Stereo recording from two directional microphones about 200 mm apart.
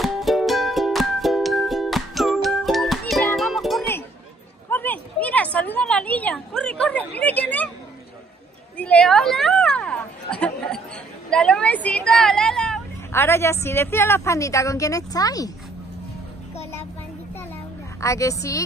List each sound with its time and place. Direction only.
0.0 s music: centre (ahead or behind)
4.6 s a sound: 10° left (ahead or behind)
8.7 s a sound: 5° left (ahead or behind)
11.2 s vehicle: 5° left (ahead or behind)
13.2 s speech: 15° left (ahead or behind)
18.0 s speech: 15° left (ahead or behind)